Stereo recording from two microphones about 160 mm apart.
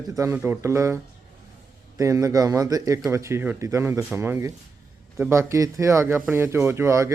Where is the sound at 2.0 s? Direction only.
20° right (ahead or behind).